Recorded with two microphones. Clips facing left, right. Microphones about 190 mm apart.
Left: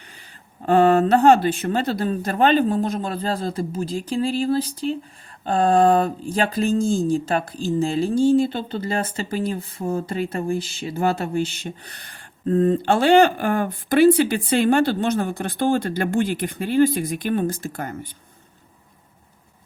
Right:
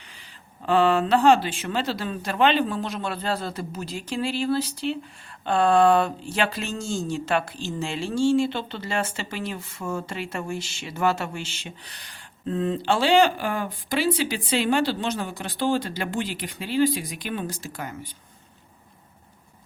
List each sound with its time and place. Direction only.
0.6 s speech: 50° left (ahead or behind)